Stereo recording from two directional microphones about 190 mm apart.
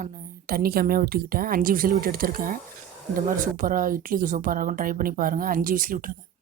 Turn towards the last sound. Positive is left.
turn(degrees=-45)  # may be behind; listen again after turning